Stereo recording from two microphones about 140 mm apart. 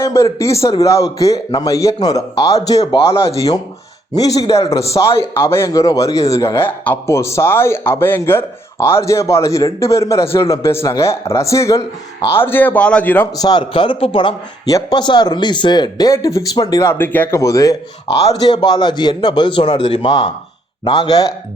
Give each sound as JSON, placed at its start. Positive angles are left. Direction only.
{"t": 0.0, "sound": "a man's voice", "side_deg": 20}
{"t": 4.4, "sound": "a man's voice", "side_deg": 25}
{"t": 13.3, "sound": "a man's voice", "side_deg": 30}